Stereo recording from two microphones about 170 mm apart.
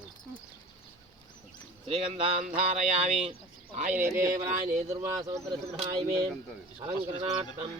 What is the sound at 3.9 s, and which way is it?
Speech, 15° right (ahead or behind).